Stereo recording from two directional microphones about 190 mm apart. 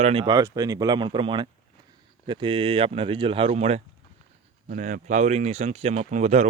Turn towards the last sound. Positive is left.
turn(degrees=-40)  # may be behind; listen again after turning